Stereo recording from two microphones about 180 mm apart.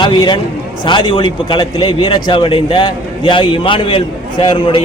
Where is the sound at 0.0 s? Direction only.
25° left (ahead or behind).